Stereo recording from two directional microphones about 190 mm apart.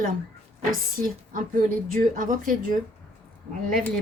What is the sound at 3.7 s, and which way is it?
Speech, centre (ahead or behind).